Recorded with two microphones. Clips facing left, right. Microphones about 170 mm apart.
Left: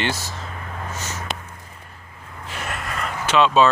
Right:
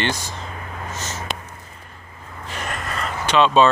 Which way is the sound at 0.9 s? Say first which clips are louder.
Right 1 dB; 10° left (ahead or behind).